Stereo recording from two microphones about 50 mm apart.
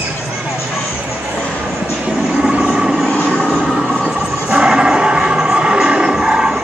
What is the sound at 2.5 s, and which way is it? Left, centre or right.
Vehicle, centre.